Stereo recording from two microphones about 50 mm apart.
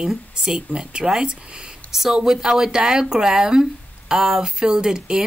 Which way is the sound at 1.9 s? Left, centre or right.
Centre.